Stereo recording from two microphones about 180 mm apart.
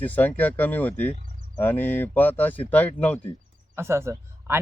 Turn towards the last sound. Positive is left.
turn(degrees=-15)  # may be behind; listen again after turning